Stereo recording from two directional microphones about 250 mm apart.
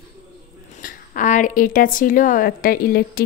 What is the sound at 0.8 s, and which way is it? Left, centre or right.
A woman's voice, left.